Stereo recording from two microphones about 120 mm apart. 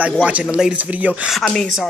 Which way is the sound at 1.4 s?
5° left (ahead or behind).